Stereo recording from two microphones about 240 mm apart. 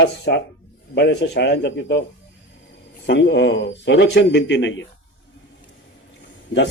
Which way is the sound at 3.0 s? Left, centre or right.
Left.